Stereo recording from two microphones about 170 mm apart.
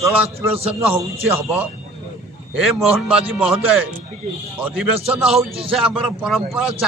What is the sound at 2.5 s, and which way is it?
A man's voice, 5° right (ahead or behind).